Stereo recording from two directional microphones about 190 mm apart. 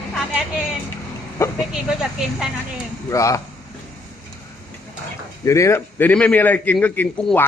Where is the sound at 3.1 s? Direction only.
15° left (ahead or behind).